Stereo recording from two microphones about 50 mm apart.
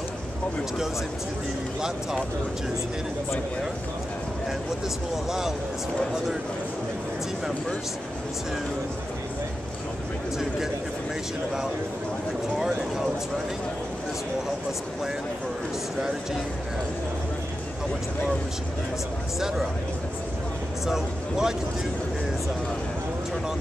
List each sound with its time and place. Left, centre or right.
5.1 s speech: centre
12.5 s speech: centre
19.4 s speech: centre
20.8 s speech: centre